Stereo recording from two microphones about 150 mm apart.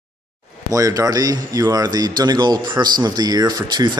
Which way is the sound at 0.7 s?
20° right (ahead or behind).